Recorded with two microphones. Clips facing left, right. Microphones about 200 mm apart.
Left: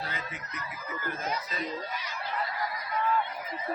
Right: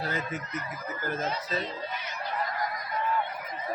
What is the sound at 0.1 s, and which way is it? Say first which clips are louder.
Speech: right 7 dB; 45° right (ahead or behind).